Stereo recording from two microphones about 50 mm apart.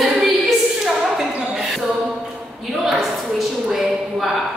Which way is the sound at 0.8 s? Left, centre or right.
Centre.